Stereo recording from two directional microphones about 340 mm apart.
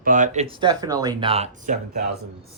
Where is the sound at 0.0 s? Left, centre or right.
Right.